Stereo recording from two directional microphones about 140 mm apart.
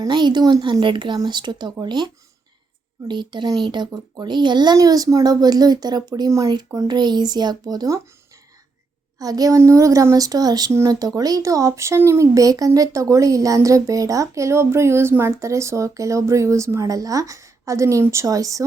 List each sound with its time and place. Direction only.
0.0 s a woman's voice: 35° right (ahead or behind)
3.1 s a woman's voice: 35° right (ahead or behind)
9.1 s speech: 25° right (ahead or behind)